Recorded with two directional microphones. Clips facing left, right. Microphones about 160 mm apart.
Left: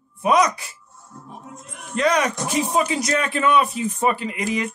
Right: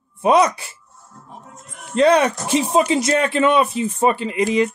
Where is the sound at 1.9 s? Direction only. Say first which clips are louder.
Right 6 dB; 30° right (ahead or behind).